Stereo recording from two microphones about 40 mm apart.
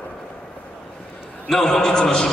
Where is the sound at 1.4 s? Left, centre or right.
Centre.